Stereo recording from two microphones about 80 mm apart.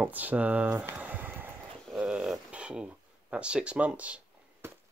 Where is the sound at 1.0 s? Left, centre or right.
Right.